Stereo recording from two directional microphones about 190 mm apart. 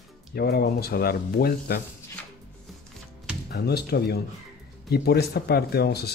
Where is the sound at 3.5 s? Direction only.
55° left (ahead or behind).